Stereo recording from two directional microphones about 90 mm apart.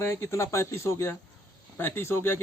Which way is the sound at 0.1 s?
35° left (ahead or behind).